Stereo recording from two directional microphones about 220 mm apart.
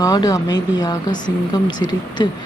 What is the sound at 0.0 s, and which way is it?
Speech, 15° left (ahead or behind).